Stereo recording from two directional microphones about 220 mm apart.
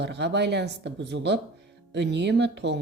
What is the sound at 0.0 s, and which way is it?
Speech, 50° right (ahead or behind).